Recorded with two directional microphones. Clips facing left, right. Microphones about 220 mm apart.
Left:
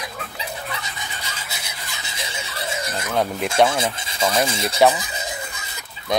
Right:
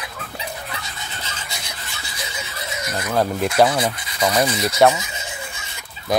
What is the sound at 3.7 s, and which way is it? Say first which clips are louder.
Rub: right 2 dB; 25° left (ahead or behind).